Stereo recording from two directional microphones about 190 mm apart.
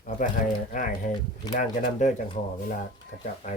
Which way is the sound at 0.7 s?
45° left (ahead or behind).